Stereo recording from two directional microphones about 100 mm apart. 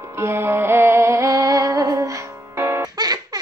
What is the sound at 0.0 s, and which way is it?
Music, 25° right (ahead or behind).